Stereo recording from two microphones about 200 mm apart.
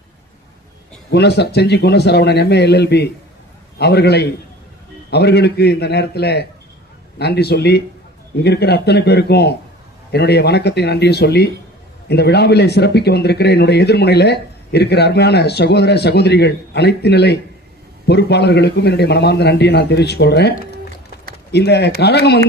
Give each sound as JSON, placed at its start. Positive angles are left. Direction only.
{"t": 1.1, "sound": "speech", "side_deg": 55}